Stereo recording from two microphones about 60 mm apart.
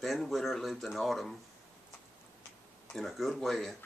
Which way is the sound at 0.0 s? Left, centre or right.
Centre.